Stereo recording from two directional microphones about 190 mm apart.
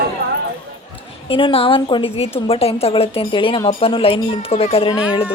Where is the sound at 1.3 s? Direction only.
30° left (ahead or behind).